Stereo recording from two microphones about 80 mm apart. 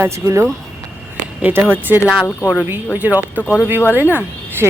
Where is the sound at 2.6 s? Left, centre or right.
Right.